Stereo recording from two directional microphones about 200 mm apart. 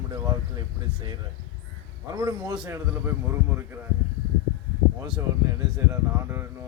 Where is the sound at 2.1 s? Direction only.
15° right (ahead or behind).